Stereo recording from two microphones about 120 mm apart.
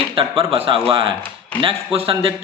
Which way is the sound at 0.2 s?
50° right (ahead or behind).